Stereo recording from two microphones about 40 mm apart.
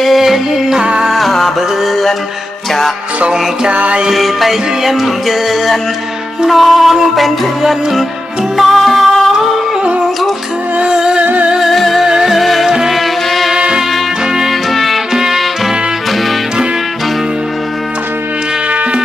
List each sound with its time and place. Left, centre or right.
0.2 s music: centre
3.7 s music: right
4.1 s music: centre
10.8 s music: centre
11.6 s music: centre
12.6 s music: centre
12.9 s music: centre
13.6 s music: right
14.5 s music: centre